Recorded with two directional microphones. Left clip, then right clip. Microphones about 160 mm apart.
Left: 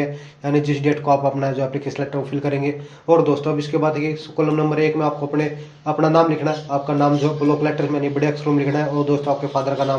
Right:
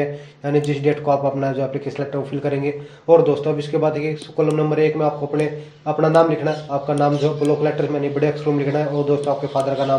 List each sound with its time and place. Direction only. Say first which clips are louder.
0.5 s speech: right 1 dB; 20° left (ahead or behind)